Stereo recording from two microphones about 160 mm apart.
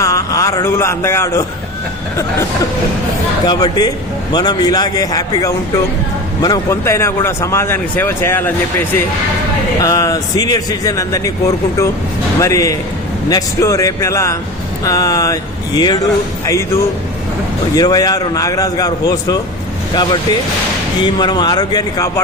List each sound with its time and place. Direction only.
0.0 s a man's voice: 20° left (ahead or behind)
3.4 s a man's voice: 25° left (ahead or behind)
9.8 s a man's voice: 20° left (ahead or behind)